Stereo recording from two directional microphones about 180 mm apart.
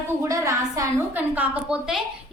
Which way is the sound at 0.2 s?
20° right (ahead or behind).